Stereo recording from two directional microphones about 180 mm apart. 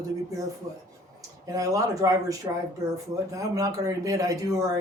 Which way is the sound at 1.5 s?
20° right (ahead or behind).